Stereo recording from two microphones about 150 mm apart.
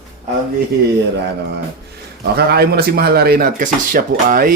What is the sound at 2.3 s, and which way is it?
Speech, 90° right.